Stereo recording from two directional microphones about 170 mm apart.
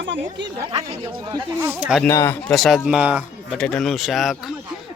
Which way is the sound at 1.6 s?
5° right (ahead or behind).